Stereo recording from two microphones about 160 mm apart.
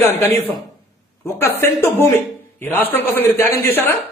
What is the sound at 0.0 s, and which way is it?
A woman's voice, 15° left (ahead or behind).